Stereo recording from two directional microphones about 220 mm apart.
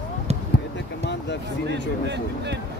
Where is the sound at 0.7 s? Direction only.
50° left (ahead or behind).